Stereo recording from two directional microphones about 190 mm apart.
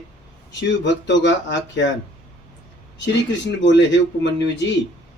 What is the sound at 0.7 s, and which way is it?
Speech, 70° left (ahead or behind).